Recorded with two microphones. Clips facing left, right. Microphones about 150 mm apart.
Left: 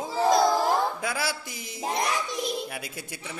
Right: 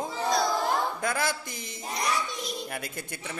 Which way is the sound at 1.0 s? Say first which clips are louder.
Right 1 dB; 5° left (ahead or behind).